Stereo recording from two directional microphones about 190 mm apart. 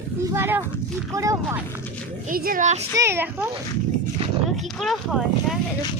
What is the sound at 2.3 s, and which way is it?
Speech, 50° right (ahead or behind).